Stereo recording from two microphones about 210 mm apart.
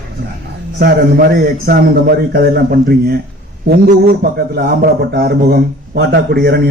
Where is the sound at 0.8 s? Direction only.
45° right (ahead or behind).